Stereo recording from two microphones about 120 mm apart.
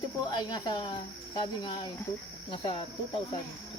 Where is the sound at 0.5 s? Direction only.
40° left (ahead or behind).